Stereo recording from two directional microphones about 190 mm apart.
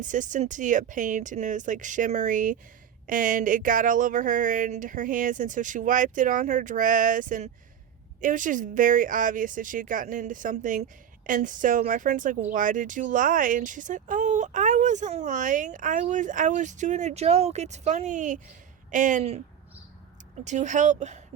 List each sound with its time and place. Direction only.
0.0 s speech: 40° right (ahead or behind)
20.4 s speech: 40° right (ahead or behind)